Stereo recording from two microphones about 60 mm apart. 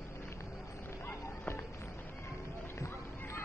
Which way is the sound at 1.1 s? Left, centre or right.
Left.